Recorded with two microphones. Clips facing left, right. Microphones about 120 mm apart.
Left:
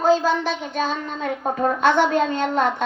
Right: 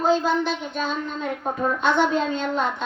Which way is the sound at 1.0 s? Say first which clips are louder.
Left 2 dB; 50° left (ahead or behind).